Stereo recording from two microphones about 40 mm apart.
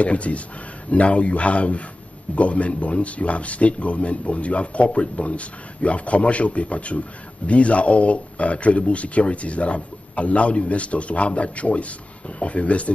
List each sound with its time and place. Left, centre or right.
0.0 s a man's voice: left